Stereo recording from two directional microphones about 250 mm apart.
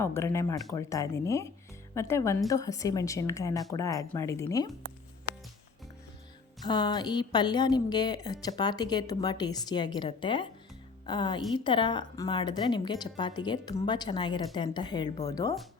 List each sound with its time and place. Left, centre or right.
0.0 s a woman's voice: centre
6.7 s a woman's voice: centre